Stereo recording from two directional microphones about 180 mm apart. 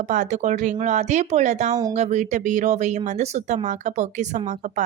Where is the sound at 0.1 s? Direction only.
45° right (ahead or behind).